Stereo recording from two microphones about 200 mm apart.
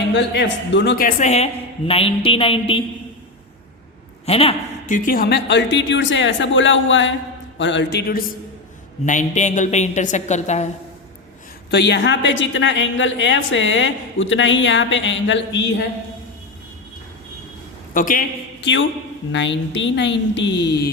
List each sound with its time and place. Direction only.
0.1 s speech: 60° left (ahead or behind); by 1.5 s 35° left (ahead or behind)
1.9 s a sound: 30° left (ahead or behind)
4.3 s a woman's voice: 30° left (ahead or behind)
4.9 s speech: 45° left (ahead or behind)
9.0 s a woman's voice: 40° left (ahead or behind)
11.7 s a woman's voice: 60° left (ahead or behind)
17.9 s a man's voice: 40° left (ahead or behind)
18.6 s speech: 65° left (ahead or behind)